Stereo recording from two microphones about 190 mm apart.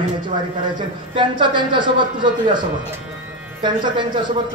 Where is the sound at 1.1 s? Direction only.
25° right (ahead or behind).